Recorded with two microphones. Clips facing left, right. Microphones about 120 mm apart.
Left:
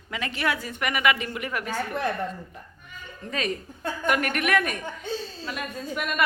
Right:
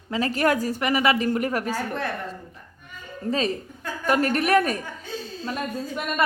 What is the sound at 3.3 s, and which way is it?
A woman's voice, 30° right (ahead or behind).